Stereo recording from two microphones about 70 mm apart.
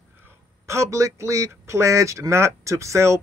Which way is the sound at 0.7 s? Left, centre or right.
Right.